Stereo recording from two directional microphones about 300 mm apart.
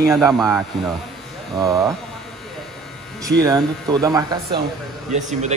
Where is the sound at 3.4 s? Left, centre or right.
Centre.